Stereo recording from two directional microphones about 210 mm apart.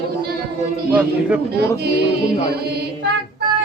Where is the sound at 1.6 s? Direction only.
50° right (ahead or behind).